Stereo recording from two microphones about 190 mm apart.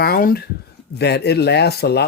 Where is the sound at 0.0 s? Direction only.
50° left (ahead or behind).